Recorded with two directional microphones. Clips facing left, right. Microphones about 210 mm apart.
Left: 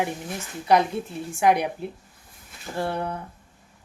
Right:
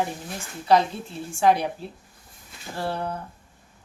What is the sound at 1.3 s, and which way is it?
Speech, 15° left (ahead or behind).